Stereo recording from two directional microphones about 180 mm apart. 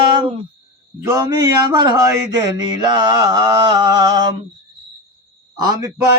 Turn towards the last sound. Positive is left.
turn(degrees=-15)  # may be behind; listen again after turning